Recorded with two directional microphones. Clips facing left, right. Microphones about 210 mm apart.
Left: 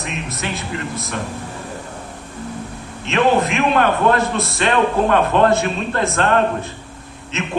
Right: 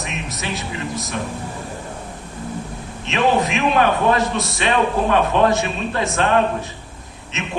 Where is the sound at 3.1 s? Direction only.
55° left (ahead or behind).